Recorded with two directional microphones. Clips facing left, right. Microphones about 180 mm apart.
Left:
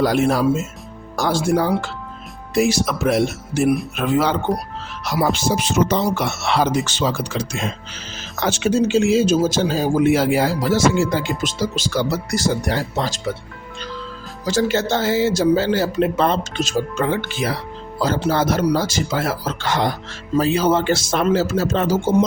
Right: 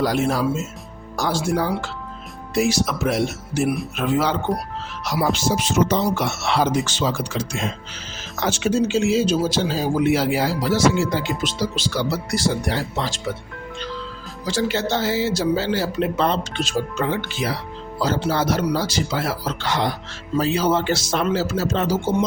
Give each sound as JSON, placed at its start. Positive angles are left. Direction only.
{"t": 0.0, "sound": "speech", "side_deg": 60}
{"t": 8.4, "sound": "speech", "side_deg": 65}
{"t": 14.4, "sound": "speech", "side_deg": 45}